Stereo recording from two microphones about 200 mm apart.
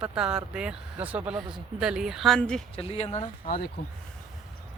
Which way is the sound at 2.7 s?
30° left (ahead or behind).